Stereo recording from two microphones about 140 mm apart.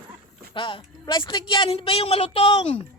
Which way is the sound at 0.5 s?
35° left (ahead or behind).